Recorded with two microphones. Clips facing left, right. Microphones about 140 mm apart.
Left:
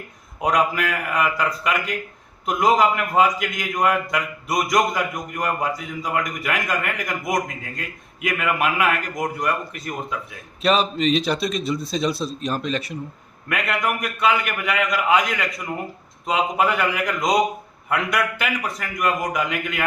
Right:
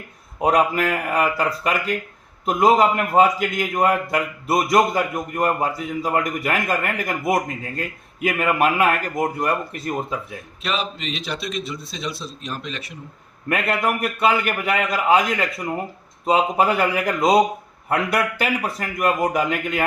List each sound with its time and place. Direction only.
0.3 s a man's voice: 30° right (ahead or behind)
10.6 s a man's voice: 40° left (ahead or behind)
13.5 s a man's voice: 30° right (ahead or behind)